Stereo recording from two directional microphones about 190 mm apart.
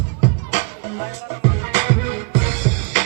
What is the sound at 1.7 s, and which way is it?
Music, 40° right (ahead or behind).